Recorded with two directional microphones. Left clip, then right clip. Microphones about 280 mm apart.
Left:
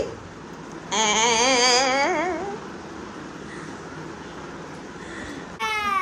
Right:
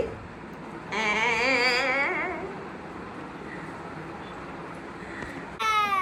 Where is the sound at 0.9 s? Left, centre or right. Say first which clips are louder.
Left 5 dB; centre.